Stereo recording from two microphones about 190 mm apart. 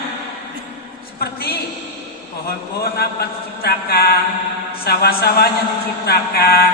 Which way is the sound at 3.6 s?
55° left (ahead or behind).